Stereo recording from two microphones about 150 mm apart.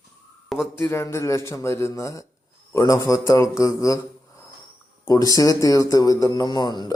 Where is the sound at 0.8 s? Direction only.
15° left (ahead or behind).